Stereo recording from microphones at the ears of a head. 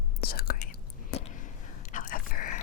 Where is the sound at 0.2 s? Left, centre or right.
Left.